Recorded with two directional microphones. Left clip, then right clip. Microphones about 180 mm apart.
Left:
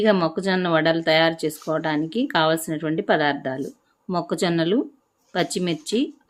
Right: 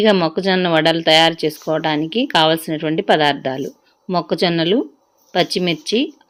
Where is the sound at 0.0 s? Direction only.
10° right (ahead or behind).